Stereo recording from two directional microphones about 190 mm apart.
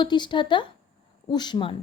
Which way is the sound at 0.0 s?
25° left (ahead or behind).